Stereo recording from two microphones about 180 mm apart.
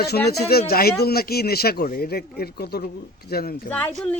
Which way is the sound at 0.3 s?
60° left (ahead or behind).